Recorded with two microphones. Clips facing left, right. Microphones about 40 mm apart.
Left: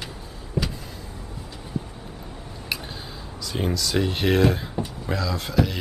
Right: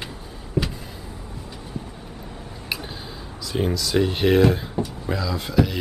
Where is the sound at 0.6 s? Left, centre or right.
Centre.